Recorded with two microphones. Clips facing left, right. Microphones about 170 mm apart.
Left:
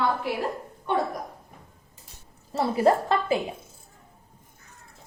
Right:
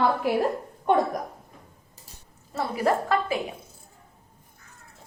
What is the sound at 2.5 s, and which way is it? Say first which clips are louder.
Speech: left 3 dB; 30° left (ahead or behind).